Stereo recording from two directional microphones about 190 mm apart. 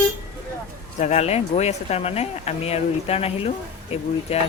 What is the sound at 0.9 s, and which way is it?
Speech, 35° left (ahead or behind).